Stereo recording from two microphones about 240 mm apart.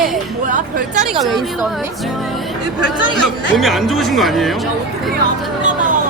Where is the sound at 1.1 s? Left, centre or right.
Centre.